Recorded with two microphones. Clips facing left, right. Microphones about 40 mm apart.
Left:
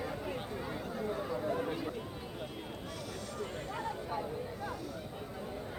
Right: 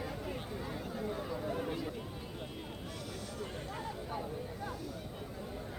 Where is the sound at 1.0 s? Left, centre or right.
Centre.